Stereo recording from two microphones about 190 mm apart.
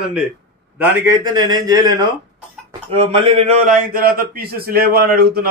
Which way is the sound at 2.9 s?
35° right (ahead or behind).